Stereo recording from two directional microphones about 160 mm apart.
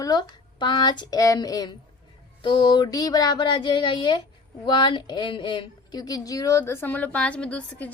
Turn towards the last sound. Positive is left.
turn(degrees=10)  # may be behind; listen again after turning